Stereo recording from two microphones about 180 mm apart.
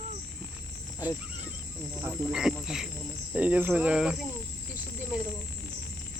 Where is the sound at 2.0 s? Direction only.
5° right (ahead or behind).